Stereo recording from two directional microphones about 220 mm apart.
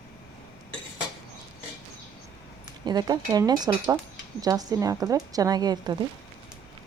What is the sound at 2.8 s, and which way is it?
A woman's voice, 20° right (ahead or behind).